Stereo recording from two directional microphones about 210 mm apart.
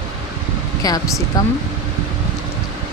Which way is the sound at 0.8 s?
15° left (ahead or behind).